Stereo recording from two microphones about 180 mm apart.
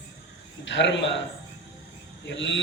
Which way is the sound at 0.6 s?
85° left.